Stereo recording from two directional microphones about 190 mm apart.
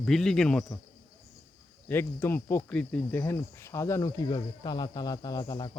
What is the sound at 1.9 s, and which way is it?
Speech, 10° left (ahead or behind).